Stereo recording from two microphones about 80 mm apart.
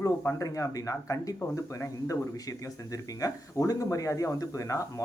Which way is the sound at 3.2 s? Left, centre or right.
Left.